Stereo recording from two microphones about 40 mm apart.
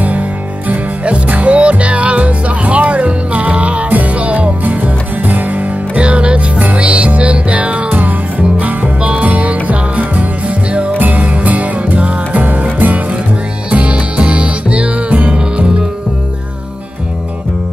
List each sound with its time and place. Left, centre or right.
0.0 s music: right